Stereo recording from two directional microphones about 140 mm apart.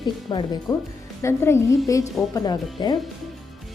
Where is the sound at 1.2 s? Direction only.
20° left (ahead or behind).